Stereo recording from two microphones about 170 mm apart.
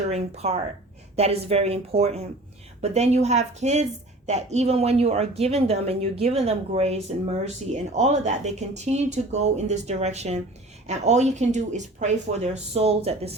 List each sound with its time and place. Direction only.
0.1 s speech: 40° right (ahead or behind)